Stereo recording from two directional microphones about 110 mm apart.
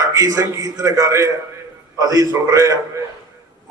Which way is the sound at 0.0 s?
30° right (ahead or behind).